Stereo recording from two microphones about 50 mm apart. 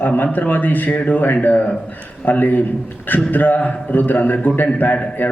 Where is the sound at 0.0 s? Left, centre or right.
Left.